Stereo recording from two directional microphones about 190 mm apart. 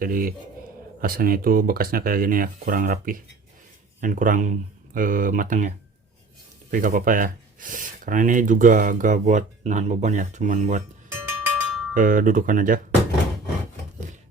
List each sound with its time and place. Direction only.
0.0 s speech: 50° right (ahead or behind)
11.1 s music: 10° right (ahead or behind)
11.9 s speech: 45° right (ahead or behind)